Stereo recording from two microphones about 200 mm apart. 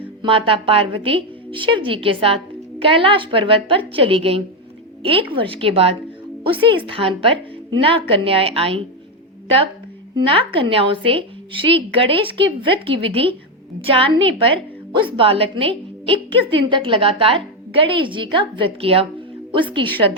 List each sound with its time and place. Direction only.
0.2 s a woman's voice: 25° right (ahead or behind)
10.2 s a woman's voice: 25° right (ahead or behind)